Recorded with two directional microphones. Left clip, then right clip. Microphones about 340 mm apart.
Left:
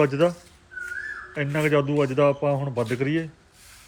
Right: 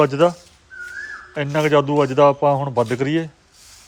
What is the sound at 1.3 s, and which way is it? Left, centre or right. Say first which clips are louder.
A man's voice: right 6 dB; centre.